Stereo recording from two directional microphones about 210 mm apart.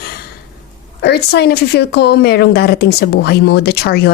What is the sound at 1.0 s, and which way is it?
Speech, 50° left (ahead or behind).